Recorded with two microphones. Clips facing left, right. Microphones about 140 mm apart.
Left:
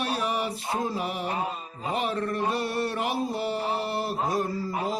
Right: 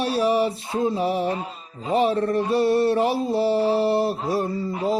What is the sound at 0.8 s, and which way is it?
Mantra, 25° right (ahead or behind).